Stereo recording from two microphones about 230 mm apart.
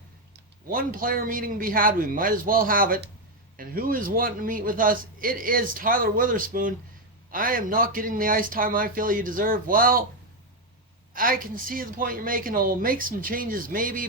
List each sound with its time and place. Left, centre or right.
0.7 s a man's voice: right
11.1 s a man's voice: right